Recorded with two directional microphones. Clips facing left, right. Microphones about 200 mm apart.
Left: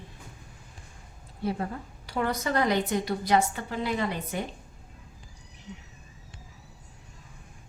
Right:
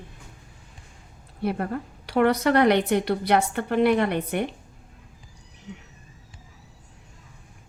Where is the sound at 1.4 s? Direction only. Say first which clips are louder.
Right 4 dB; 65° right (ahead or behind).